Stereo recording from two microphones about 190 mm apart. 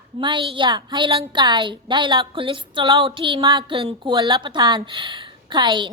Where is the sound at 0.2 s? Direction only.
25° right (ahead or behind).